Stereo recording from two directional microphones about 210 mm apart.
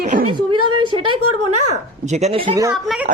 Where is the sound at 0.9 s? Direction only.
25° right (ahead or behind).